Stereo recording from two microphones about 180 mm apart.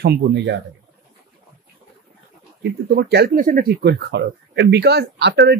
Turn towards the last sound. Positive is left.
turn(degrees=-70)  # may be behind; listen again after turning